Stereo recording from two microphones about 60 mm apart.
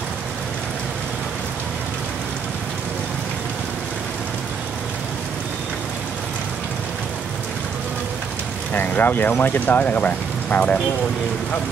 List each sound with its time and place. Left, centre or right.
8.7 s speech: left